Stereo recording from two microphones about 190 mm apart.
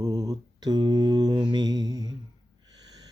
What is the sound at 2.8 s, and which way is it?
Snort, 20° right (ahead or behind).